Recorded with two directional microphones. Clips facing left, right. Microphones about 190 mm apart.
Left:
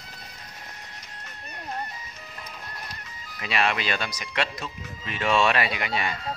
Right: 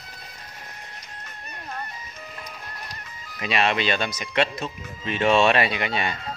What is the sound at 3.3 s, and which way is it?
Speech, 25° right (ahead or behind).